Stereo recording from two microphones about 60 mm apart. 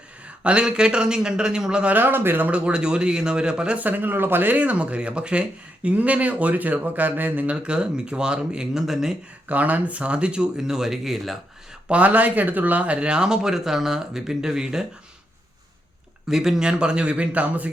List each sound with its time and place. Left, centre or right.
0.4 s speech: centre
1.9 s speech: right
2.5 s speech: centre
3.8 s speech: right
7.5 s speech: centre
9.5 s speech: right; by 11.3 s centre
11.9 s speech: right; by 14.8 s centre
16.3 s speech: centre; by 17.7 s right